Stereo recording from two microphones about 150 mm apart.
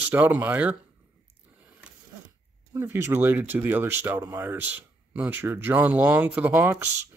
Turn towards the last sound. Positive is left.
turn(degrees=-15)  # may be behind; listen again after turning